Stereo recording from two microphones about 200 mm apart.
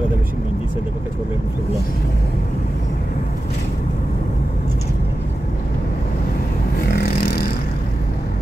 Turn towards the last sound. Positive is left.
turn(degrees=50)  # may be behind; listen again after turning